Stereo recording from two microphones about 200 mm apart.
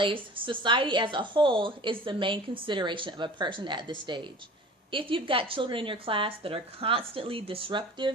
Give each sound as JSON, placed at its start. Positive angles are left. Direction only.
{"t": 0.0, "sound": "a woman's voice", "side_deg": -25}